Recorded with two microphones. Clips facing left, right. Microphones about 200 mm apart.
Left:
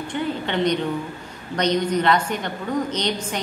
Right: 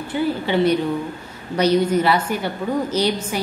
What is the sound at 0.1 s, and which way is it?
A woman's voice, 5° right (ahead or behind).